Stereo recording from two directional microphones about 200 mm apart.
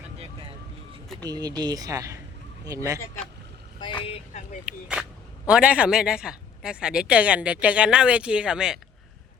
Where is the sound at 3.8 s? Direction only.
25° left (ahead or behind).